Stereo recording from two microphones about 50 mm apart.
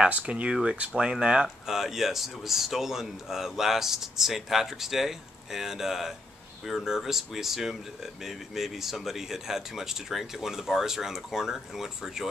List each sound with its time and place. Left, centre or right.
0.1 s speech: right
0.7 s speech: right
1.7 s speech: centre